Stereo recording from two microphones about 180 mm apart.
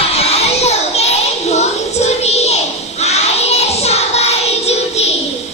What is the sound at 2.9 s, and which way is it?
Child singing, 35° left (ahead or behind).